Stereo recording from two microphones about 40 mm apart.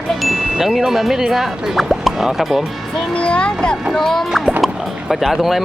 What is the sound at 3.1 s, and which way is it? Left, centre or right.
Speech, left.